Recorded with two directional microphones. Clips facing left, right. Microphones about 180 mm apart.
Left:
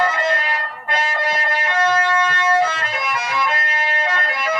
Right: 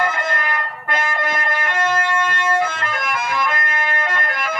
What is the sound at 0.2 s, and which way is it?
Music, 50° right (ahead or behind).